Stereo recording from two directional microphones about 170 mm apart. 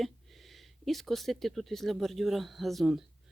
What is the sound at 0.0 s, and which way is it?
Speech, centre (ahead or behind).